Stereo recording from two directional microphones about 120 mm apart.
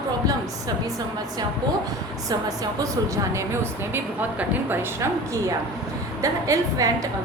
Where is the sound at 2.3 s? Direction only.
30° right (ahead or behind).